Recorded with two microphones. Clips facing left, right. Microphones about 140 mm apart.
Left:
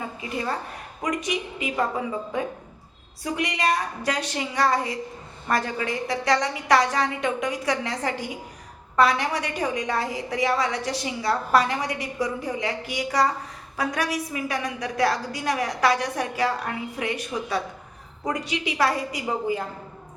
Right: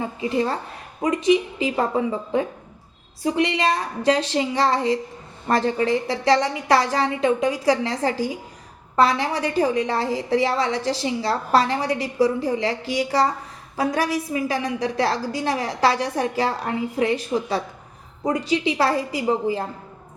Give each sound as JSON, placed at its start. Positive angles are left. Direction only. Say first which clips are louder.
{"t": 0.2, "sound": "a woman's voice", "louder": "right 7 dB", "side_deg": -30}
{"t": 3.3, "sound": "a woman's voice", "louder": "right 2 dB", "side_deg": -25}